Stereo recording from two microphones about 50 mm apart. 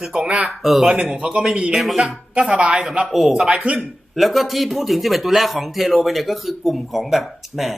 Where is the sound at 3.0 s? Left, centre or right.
Centre.